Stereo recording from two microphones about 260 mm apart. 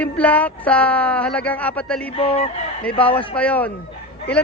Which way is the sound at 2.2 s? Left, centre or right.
Left.